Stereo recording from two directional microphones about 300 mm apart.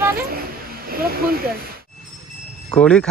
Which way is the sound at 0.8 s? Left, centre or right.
Right.